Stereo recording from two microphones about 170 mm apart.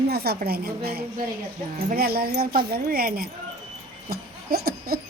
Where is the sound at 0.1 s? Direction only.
70° right (ahead or behind).